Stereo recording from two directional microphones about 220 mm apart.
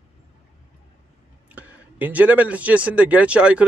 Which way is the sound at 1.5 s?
5° right (ahead or behind).